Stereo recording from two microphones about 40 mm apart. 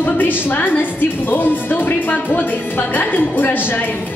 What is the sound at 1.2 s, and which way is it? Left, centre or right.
A woman's voice, left.